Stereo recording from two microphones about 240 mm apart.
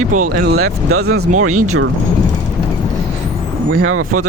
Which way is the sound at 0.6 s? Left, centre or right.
Right.